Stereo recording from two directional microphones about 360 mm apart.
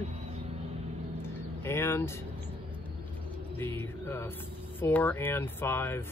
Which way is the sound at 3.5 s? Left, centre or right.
Centre.